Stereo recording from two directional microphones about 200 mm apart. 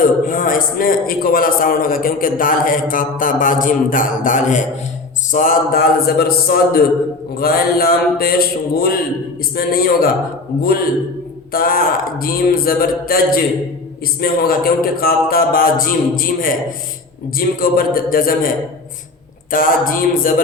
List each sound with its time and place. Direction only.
0.0 s a man's voice: 45° left (ahead or behind)